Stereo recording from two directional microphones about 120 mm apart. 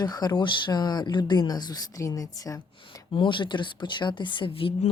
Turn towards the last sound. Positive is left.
turn(degrees=45)  # may be behind; listen again after turning